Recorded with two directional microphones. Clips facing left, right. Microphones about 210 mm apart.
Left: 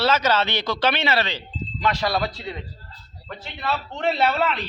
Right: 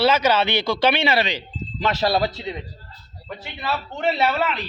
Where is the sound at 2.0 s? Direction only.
25° right (ahead or behind).